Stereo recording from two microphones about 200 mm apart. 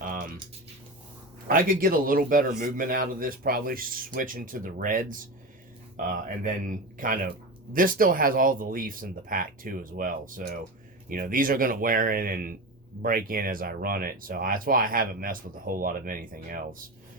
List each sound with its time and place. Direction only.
1.5 s speech: 45° right (ahead or behind)